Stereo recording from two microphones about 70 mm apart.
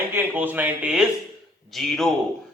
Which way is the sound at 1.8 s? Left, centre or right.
Centre.